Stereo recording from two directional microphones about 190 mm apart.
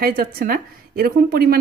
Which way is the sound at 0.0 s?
50° right (ahead or behind).